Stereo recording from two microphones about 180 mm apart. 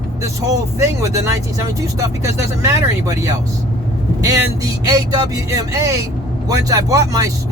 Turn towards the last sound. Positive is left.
turn(degrees=-20)  # may be behind; listen again after turning